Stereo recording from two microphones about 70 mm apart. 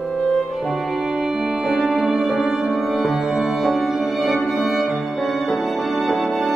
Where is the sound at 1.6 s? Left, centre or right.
Centre.